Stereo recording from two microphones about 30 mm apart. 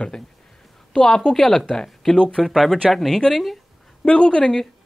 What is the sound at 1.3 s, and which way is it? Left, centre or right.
Speech, centre.